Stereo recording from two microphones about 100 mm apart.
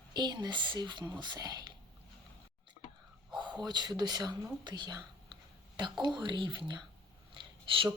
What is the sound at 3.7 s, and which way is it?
Speech, 45° right (ahead or behind).